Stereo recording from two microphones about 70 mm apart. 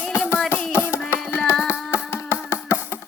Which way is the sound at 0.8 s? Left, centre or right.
Left.